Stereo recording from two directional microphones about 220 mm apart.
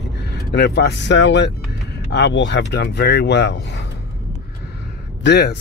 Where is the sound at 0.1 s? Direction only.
50° left (ahead or behind).